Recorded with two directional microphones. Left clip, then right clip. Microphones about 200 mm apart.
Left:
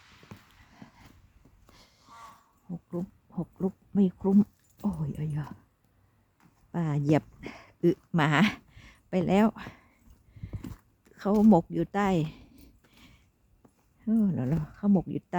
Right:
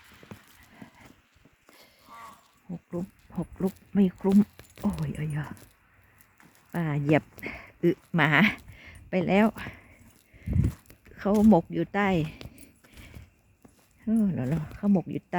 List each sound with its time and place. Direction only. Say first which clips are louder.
0.3 s clip-clop: right 3 dB; 10° right (ahead or behind)
1.7 s a sound: right 4 dB; 5° left (ahead or behind)
6.7 s speech: right 2 dB; 10° left (ahead or behind)
11.0 s a sound: right 3 dB; 10° left (ahead or behind)
11.3 s speech: right 1 dB; 5° right (ahead or behind)
11.5 s speech: right 1 dB; 10° left (ahead or behind)
14.0 s speech: right 1 dB; 10° left (ahead or behind)